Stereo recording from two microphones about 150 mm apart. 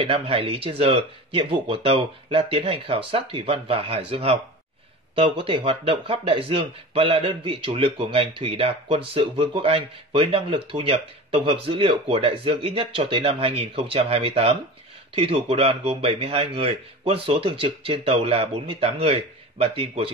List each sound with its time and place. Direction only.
0.0 s speech: 40° right (ahead or behind)